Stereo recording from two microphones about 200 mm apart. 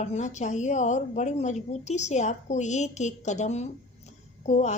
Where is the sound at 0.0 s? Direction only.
35° left (ahead or behind).